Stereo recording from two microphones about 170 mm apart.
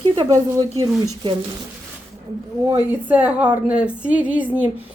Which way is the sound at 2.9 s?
10° right (ahead or behind).